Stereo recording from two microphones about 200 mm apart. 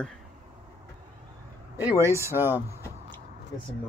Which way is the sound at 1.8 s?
10° right (ahead or behind).